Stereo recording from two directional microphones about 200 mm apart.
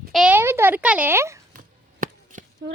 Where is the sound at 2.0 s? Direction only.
40° right (ahead or behind).